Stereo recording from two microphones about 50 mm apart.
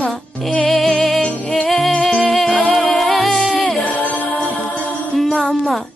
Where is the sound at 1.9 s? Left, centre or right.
Centre.